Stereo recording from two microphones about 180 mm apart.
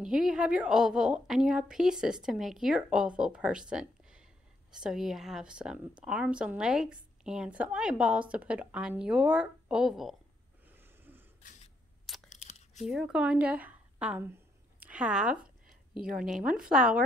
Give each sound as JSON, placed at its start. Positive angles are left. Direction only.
{"t": 0.0, "sound": "a woman's voice", "side_deg": -5}
{"t": 10.7, "sound": "a sound", "side_deg": -10}
{"t": 12.3, "sound": "tearing", "side_deg": 40}
{"t": 12.8, "sound": "a woman's voice", "side_deg": -5}